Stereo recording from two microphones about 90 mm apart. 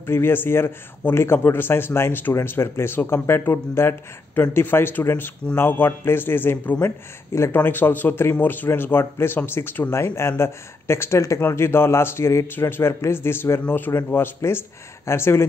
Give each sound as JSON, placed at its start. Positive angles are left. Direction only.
{"t": 0.0, "sound": "speech", "side_deg": 25}